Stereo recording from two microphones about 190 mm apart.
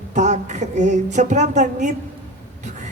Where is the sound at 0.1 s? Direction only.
40° right (ahead or behind).